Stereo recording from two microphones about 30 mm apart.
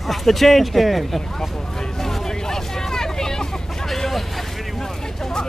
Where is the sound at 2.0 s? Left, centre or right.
Centre.